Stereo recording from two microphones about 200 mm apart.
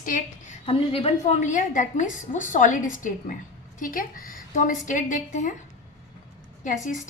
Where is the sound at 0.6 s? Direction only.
30° left (ahead or behind).